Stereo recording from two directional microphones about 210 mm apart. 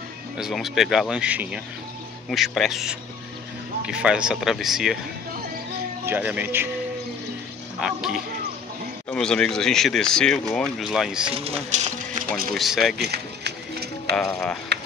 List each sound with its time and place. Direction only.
0.4 s speech: centre (ahead or behind)
6.0 s speech: 10° right (ahead or behind)
7.8 s speech: centre (ahead or behind)
11.3 s speech: 30° right (ahead or behind)
12.5 s speech: centre (ahead or behind)
13.1 s music: 50° right (ahead or behind)
14.1 s speech: 5° left (ahead or behind)